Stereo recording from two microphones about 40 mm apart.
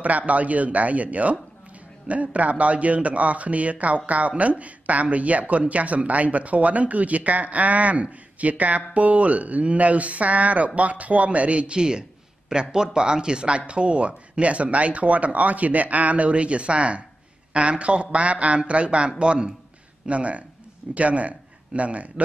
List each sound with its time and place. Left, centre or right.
0.3 s speech: right